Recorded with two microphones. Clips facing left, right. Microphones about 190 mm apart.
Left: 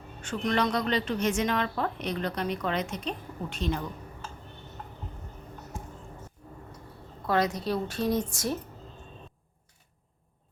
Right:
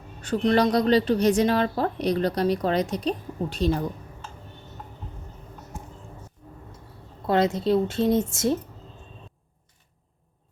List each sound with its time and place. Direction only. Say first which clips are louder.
0.2 s a woman's voice: right 7 dB; 35° right (ahead or behind)
7.3 s a woman's voice: right 6 dB; 25° right (ahead or behind)